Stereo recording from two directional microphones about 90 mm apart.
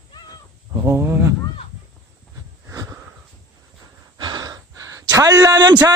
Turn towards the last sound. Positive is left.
turn(degrees=-40)  # may be behind; listen again after turning